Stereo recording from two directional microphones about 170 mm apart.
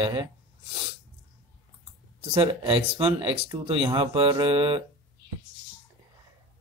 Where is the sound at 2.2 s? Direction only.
35° right (ahead or behind).